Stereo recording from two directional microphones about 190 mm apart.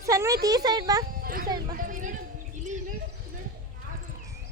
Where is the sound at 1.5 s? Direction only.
20° right (ahead or behind).